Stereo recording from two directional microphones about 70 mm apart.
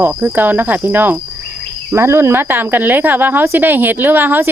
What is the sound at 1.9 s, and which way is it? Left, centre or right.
Speech, right.